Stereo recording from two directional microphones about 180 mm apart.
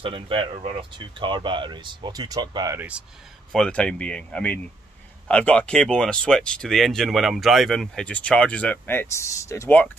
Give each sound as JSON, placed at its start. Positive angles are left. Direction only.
{"t": 0.0, "sound": "speech", "side_deg": -30}
{"t": 3.5, "sound": "speech", "side_deg": 5}